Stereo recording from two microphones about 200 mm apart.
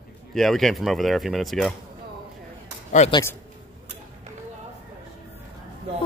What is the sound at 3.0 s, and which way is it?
Speech, 35° left (ahead or behind).